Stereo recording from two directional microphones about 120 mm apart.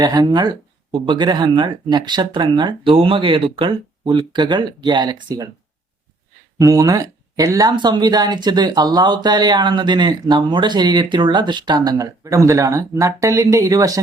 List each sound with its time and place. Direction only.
0.0 s speech: 35° right (ahead or behind)
6.6 s speech: 30° right (ahead or behind)